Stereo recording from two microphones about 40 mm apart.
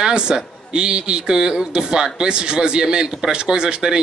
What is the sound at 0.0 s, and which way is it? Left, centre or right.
A man's voice, right.